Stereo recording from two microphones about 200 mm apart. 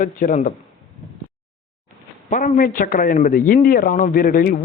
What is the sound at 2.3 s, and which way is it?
Speech, 40° left (ahead or behind).